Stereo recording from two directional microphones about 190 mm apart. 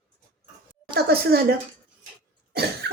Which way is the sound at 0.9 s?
55° right (ahead or behind).